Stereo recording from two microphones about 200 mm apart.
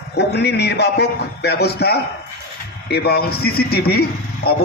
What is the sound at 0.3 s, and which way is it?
A man's voice, 55° left (ahead or behind).